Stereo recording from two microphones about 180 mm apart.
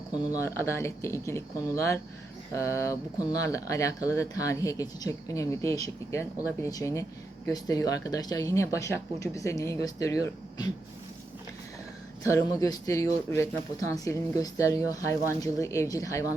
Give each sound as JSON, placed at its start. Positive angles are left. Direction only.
{"t": 0.4, "sound": "speech", "side_deg": 15}
{"t": 12.3, "sound": "speech", "side_deg": 15}